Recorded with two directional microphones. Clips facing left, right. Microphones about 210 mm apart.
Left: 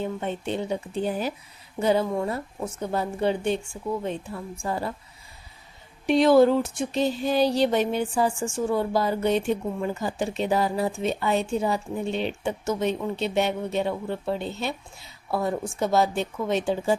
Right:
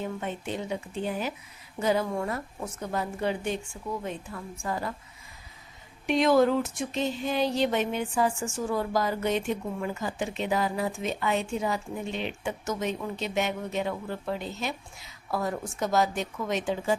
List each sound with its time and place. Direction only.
0.0 s speech: 30° left (ahead or behind)
6.1 s speech: 30° left (ahead or behind)